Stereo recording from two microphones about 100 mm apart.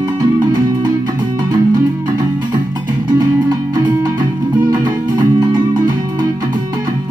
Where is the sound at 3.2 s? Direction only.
40° right (ahead or behind).